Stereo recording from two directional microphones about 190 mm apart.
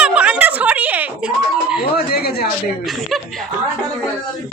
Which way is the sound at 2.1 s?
55° left (ahead or behind).